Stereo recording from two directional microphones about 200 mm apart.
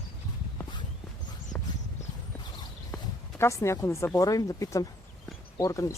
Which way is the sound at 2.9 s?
15° left (ahead or behind).